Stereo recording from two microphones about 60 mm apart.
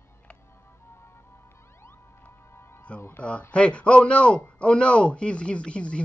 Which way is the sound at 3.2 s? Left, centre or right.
Left.